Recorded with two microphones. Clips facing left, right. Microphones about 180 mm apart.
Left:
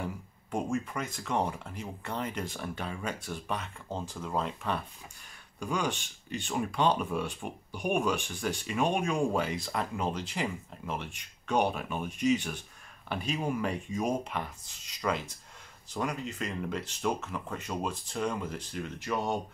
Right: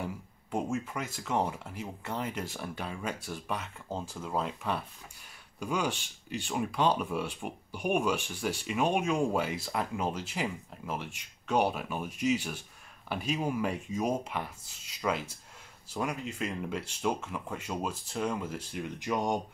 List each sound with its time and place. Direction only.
0.0 s speech: 5° right (ahead or behind)